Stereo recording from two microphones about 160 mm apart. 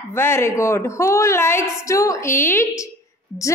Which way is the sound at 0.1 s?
15° left (ahead or behind).